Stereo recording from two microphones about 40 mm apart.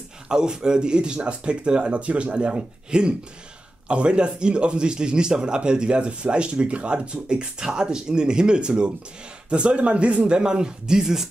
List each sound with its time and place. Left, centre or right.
0.3 s speech: centre